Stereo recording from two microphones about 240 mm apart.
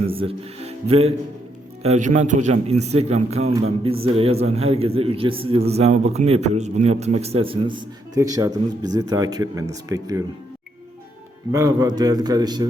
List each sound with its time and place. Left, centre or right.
0.0 s a man's voice: right
11.5 s a man's voice: centre